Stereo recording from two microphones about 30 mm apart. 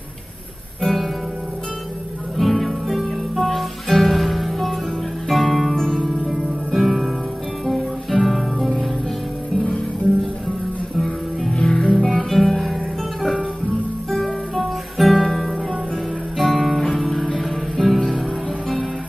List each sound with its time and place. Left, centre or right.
2.3 s music: centre
11.6 s music: left
12.1 s guitar: centre
14.6 s guitar: centre
16.3 s guitar: centre
16.8 s music: centre